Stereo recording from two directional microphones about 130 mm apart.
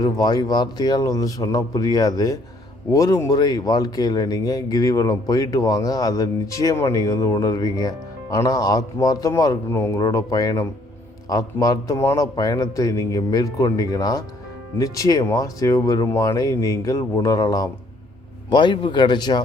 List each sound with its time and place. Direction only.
0.0 s speech: 30° left (ahead or behind)